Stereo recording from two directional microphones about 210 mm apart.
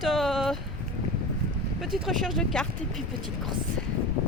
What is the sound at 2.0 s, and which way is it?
Speech, centre (ahead or behind).